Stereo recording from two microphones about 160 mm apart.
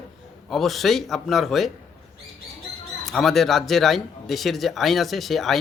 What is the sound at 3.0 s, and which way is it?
Speech, centre (ahead or behind).